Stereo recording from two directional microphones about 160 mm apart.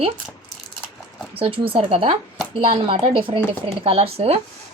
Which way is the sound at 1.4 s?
35° right (ahead or behind).